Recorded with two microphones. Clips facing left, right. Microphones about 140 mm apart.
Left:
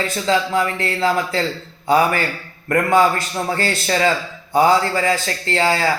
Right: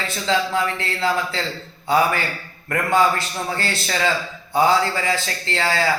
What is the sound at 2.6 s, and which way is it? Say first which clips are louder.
A man's voice: left 3 dB; 45° left (ahead or behind).